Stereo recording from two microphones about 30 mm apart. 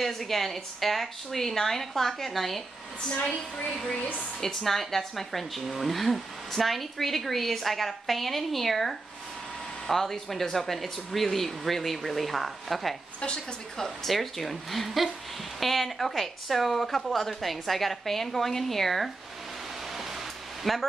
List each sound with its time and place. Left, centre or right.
0.0 s a woman's voice: centre
3.2 s a woman's voice: left
4.4 s a woman's voice: centre
10.7 s speech: centre
20.7 s speech: centre